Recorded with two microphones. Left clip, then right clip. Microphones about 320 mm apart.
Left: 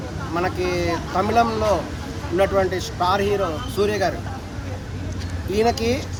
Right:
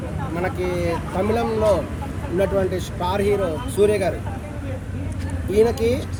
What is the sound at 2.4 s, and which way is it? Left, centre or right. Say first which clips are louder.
Speech: left 2 dB; left.